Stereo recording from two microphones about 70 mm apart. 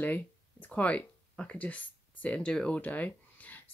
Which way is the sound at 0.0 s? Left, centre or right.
Left.